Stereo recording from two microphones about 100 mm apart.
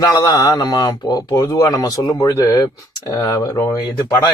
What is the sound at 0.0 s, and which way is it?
Speech, 40° left (ahead or behind).